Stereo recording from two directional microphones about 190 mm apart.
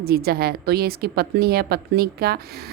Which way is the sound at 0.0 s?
55° right (ahead or behind).